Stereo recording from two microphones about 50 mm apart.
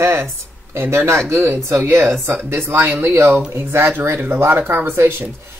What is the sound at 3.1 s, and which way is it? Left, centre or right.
Speech, right.